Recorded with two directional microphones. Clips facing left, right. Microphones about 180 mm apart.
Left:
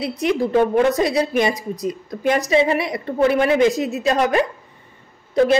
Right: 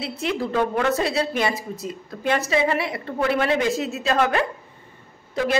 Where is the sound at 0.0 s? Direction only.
15° left (ahead or behind).